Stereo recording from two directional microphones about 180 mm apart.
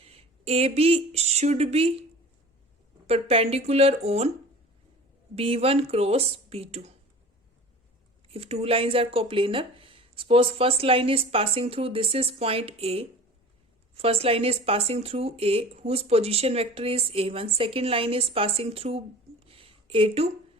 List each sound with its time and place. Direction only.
0.0 s speech: 35° right (ahead or behind)
3.1 s speech: 35° right (ahead or behind)
5.3 s speech: 35° right (ahead or behind)
8.3 s speech: 35° right (ahead or behind)